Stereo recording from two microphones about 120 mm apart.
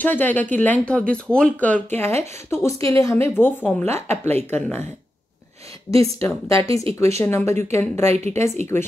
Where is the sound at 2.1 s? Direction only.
65° right (ahead or behind).